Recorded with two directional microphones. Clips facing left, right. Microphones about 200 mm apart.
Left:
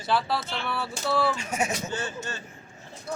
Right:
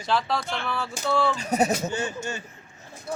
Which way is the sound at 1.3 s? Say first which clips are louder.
Right 6 dB; 35° right (ahead or behind).